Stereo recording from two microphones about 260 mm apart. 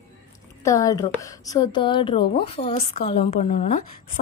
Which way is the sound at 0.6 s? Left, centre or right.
Centre.